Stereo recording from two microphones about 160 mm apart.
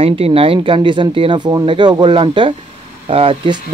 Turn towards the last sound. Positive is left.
turn(degrees=-30)  # may be behind; listen again after turning